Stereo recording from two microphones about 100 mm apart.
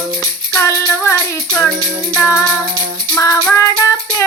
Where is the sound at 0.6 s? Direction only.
30° left (ahead or behind).